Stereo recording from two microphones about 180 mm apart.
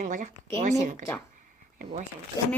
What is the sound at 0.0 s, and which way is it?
Speech, 45° right (ahead or behind).